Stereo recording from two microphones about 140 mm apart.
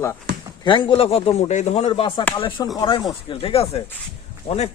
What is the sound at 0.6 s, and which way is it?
Speech, 35° left (ahead or behind).